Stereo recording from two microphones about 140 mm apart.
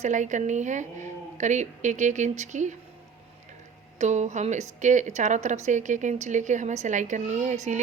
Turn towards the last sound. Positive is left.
turn(degrees=-60)  # may be behind; listen again after turning